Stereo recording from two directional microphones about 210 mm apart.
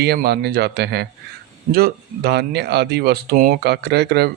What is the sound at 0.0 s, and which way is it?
Speech, 50° right (ahead or behind).